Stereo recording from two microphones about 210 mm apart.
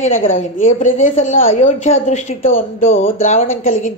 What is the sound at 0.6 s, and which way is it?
A woman's voice, 35° left (ahead or behind).